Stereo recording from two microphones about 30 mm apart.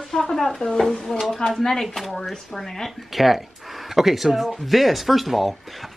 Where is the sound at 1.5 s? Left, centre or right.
Centre.